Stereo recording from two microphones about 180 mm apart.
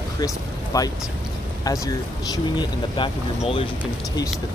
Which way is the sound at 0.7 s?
20° left (ahead or behind).